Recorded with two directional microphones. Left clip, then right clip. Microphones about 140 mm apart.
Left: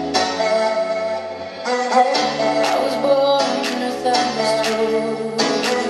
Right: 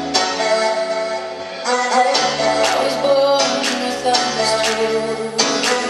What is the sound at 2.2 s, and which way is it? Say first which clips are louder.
Music: right 2 dB; 25° right (ahead or behind).